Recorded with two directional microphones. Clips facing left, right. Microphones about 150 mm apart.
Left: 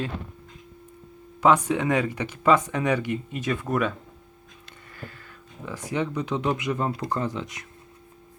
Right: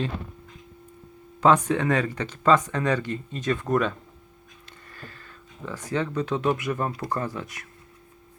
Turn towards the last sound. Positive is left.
turn(degrees=20)  # may be behind; listen again after turning